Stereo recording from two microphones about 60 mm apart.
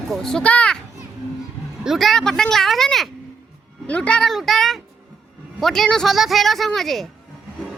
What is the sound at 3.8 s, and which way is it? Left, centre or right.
Speech, left.